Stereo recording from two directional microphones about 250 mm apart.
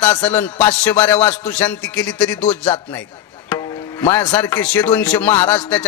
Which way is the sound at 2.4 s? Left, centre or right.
Left.